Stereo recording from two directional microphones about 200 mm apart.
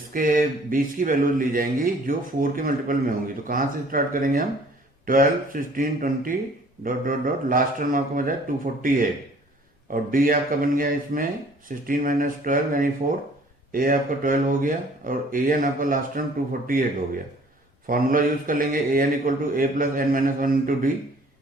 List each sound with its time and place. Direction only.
0.1 s speech: 45° right (ahead or behind)
17.8 s speech: 45° right (ahead or behind)